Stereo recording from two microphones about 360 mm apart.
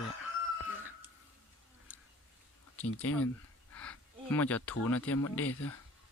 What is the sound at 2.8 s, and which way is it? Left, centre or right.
Speech, left.